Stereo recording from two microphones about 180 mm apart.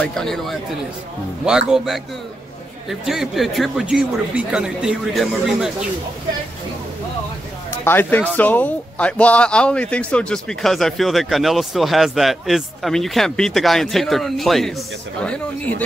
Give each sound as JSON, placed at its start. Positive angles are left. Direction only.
{"t": 0.0, "sound": "speech", "side_deg": 5}
{"t": 2.9, "sound": "speech", "side_deg": 0}
{"t": 7.8, "sound": "speech", "side_deg": 10}